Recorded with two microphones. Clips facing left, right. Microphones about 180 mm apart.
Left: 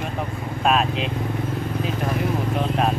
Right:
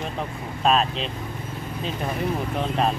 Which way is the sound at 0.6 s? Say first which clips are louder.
Left 1 dB; 5° left (ahead or behind).